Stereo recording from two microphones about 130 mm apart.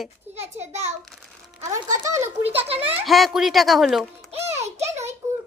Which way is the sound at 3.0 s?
Centre (ahead or behind).